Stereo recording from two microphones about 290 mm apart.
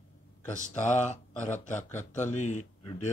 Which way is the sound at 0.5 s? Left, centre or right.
Left.